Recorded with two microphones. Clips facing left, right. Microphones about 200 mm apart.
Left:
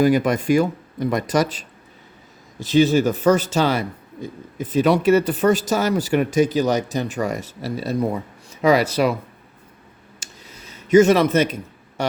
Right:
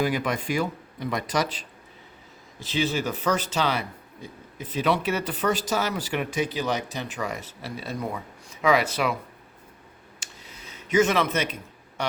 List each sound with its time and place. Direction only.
0.0 s speech: 45° left (ahead or behind)
10.2 s a sound: 45° left (ahead or behind)
10.7 s a man's voice: 45° left (ahead or behind)